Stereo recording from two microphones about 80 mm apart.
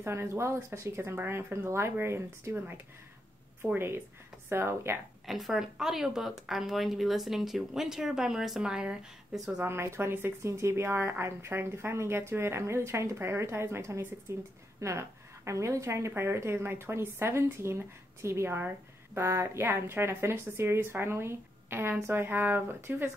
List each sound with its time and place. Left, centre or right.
0.0 s speech: right
3.7 s speech: right
5.2 s speech: centre
9.6 s a woman's voice: right